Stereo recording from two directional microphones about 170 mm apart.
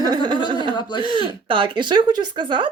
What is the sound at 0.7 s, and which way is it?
Speech, 25° left (ahead or behind).